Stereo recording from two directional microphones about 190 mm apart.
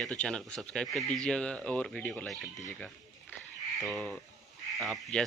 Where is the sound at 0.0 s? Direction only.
5° left (ahead or behind).